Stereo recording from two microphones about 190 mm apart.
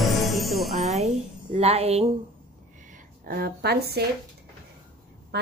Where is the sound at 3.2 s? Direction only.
50° right (ahead or behind).